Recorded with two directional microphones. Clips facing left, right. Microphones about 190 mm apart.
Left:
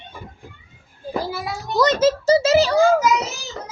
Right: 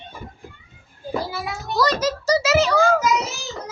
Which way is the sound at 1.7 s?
20° left (ahead or behind).